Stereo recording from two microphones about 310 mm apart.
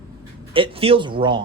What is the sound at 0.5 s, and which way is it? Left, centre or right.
Speech, centre.